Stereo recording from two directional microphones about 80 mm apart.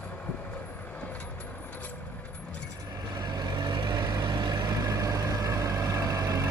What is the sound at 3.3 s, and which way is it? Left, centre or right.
Vehicle, right.